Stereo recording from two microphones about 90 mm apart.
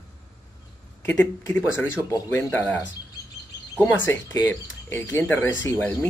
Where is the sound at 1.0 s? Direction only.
15° left (ahead or behind).